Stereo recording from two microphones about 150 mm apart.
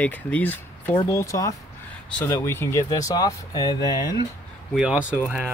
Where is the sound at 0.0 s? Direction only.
10° left (ahead or behind).